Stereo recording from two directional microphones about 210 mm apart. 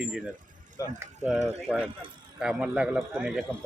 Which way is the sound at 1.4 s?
30° right (ahead or behind).